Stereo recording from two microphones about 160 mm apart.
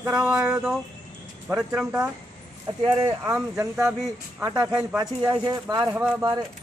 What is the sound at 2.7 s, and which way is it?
Speech, 25° right (ahead or behind).